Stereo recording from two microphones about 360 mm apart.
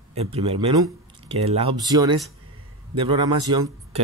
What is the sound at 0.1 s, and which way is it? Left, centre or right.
Speech, centre.